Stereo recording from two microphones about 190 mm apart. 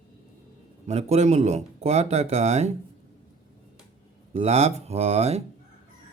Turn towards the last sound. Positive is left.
turn(degrees=-35)  # may be behind; listen again after turning